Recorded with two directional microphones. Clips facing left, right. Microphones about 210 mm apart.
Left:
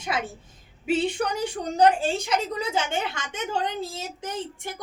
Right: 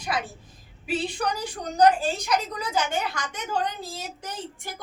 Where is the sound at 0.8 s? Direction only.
25° left (ahead or behind).